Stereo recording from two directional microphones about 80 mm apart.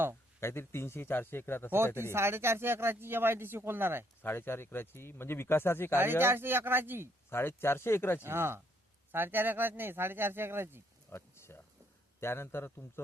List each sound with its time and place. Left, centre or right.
0.3 s speech: left
2.0 s speech: right
4.2 s speech: left
6.0 s speech: right
7.3 s speech: left
8.2 s speech: right
11.1 s a sound: left
12.2 s speech: left